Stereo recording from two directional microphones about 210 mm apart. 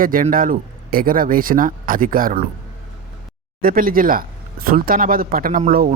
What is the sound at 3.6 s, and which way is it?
Speech, 45° right (ahead or behind).